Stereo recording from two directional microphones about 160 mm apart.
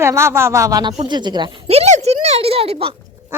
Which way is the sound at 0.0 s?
15° right (ahead or behind).